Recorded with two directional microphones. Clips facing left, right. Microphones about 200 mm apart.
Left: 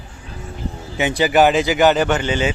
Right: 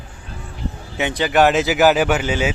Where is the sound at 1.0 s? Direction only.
5° left (ahead or behind).